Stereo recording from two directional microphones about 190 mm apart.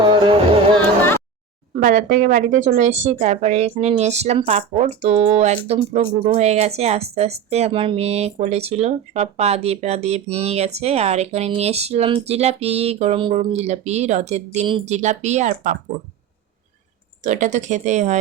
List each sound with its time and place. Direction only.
0.0 s music: 25° right (ahead or behind)
0.8 s a sound: 10° left (ahead or behind)
1.7 s speech: 45° right (ahead or behind)
17.2 s speech: 40° right (ahead or behind)